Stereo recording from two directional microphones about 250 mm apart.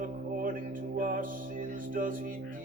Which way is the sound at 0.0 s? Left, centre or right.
Right.